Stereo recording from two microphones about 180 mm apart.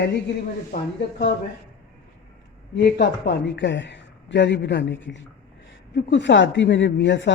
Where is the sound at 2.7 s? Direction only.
70° left (ahead or behind).